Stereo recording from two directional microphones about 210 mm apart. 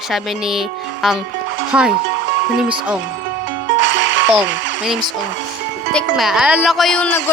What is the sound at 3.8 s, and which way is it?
Music, 60° right (ahead or behind).